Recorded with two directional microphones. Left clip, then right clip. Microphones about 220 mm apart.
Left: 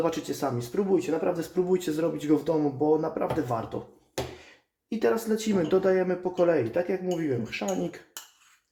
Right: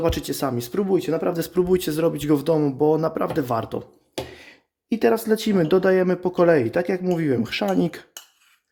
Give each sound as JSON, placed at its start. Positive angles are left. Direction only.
{"t": 0.0, "sound": "speech", "side_deg": -45}
{"t": 4.9, "sound": "speech", "side_deg": -50}